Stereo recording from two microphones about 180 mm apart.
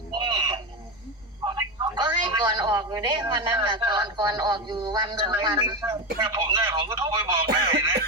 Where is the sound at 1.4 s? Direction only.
25° right (ahead or behind).